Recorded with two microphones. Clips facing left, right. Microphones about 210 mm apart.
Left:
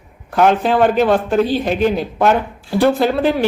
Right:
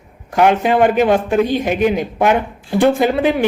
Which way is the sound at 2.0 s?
15° right (ahead or behind).